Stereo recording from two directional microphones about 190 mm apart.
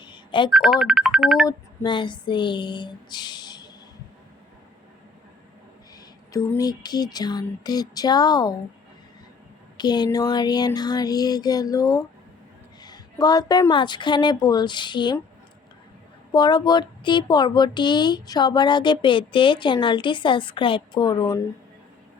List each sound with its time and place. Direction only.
0.0 s telephone dialing: 25° left (ahead or behind)
0.5 s speech: centre (ahead or behind)
1.5 s a sound: 25° left (ahead or behind)
6.3 s a woman's voice: 20° left (ahead or behind)
9.7 s a woman's voice: 20° left (ahead or behind)
16.3 s a woman's voice: 20° left (ahead or behind)